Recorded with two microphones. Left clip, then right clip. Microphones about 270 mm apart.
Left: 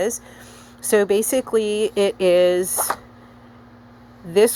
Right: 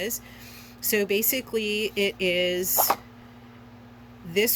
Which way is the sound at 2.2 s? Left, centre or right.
Left.